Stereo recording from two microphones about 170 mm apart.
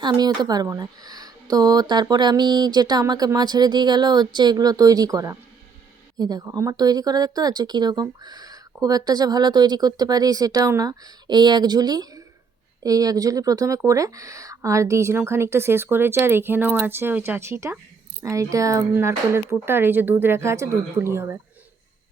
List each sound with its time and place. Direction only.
0.0 s speech: 25° right (ahead or behind)